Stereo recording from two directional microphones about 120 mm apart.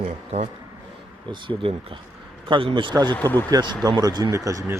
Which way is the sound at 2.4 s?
45° right (ahead or behind).